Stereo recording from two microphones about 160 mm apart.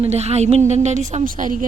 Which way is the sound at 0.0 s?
40° right (ahead or behind).